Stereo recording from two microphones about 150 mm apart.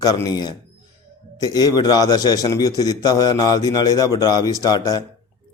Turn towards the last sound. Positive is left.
turn(degrees=25)  # may be behind; listen again after turning